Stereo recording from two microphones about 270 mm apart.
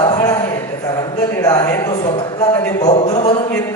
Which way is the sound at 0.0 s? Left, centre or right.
Centre.